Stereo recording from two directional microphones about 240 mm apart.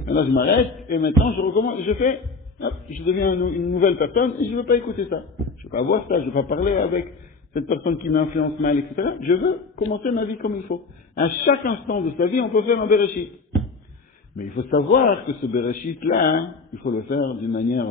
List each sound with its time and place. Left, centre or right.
0.0 s a man's voice: left
0.8 s a sound: left
1.2 s a man's voice: left
14.5 s a man's voice: left